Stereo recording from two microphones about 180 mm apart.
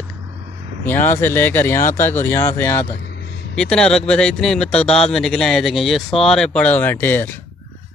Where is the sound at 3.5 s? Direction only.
5° left (ahead or behind).